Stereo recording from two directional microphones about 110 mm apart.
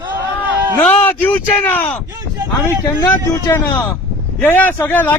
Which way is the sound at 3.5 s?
25° left (ahead or behind).